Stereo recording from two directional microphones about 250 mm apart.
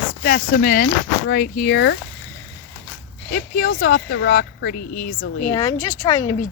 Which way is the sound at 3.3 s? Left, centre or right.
Left.